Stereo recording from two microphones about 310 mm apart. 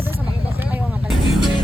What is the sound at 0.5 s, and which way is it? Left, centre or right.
Vehicle, centre.